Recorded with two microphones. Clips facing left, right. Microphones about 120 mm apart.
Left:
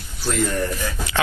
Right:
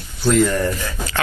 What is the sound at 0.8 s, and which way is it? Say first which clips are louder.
Speech: left 1 dB; 15° left (ahead or behind).